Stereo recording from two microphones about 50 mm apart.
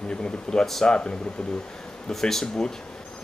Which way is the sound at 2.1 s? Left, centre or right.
Centre.